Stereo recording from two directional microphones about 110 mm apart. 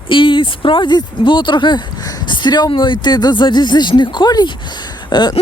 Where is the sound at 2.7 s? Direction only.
45° left (ahead or behind).